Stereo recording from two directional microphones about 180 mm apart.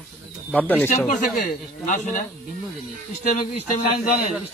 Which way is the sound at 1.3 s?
50° left (ahead or behind).